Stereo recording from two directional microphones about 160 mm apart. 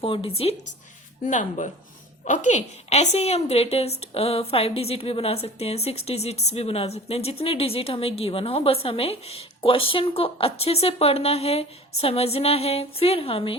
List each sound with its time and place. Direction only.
0.0 s a woman's voice: 35° left (ahead or behind)
1.2 s a woman's voice: 50° left (ahead or behind)